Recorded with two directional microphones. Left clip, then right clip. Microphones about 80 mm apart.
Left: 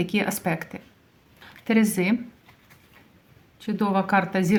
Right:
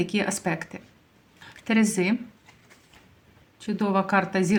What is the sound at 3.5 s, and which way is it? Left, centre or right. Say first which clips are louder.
Speech: left 1 dB; left.